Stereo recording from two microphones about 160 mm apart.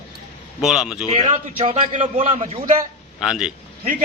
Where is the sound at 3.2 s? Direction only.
5° right (ahead or behind).